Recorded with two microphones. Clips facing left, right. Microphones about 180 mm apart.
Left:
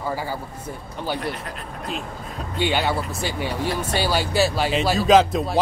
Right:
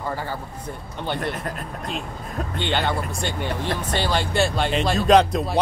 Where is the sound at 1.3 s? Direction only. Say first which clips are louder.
Right 3 dB; 45° right (ahead or behind).